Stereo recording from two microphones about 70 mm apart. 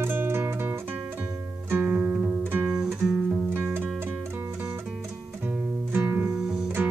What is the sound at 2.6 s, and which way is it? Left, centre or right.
Guitar, centre.